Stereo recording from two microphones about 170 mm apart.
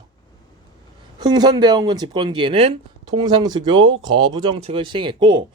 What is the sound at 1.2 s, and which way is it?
Speech, 25° right (ahead or behind).